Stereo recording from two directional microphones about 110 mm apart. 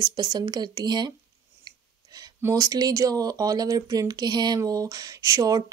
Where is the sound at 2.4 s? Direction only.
35° right (ahead or behind).